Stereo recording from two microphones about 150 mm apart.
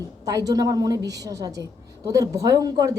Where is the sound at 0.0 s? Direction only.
25° right (ahead or behind).